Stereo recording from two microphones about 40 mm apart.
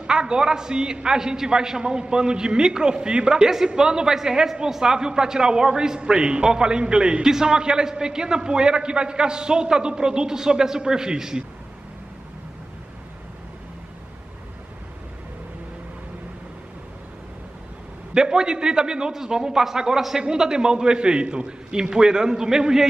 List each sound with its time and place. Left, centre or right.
0.0 s a man's voice: right
18.1 s a man's voice: centre